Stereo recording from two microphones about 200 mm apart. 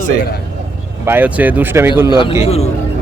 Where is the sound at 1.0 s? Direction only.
10° right (ahead or behind).